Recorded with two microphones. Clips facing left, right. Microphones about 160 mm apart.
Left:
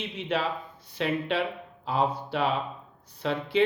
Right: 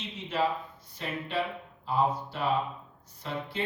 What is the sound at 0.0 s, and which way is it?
A man's voice, 70° left (ahead or behind).